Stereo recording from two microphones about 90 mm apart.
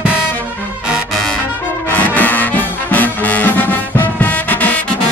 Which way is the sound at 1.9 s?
20° left (ahead or behind).